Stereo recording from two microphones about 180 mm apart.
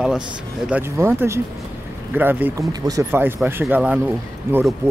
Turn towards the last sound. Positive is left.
turn(degrees=-10)  # may be behind; listen again after turning